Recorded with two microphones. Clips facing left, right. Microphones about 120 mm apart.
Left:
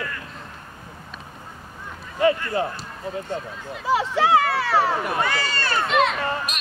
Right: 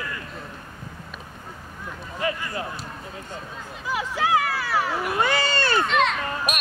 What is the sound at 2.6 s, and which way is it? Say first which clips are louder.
Speech: left 7 dB; 30° left (ahead or behind).